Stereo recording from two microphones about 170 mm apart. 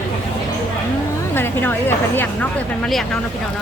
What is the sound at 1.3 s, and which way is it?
Speech, 10° left (ahead or behind).